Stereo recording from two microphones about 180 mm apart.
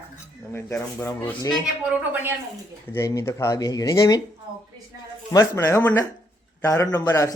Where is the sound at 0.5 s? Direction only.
15° left (ahead or behind).